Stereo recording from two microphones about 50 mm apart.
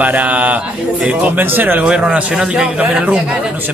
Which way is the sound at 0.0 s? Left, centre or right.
Right.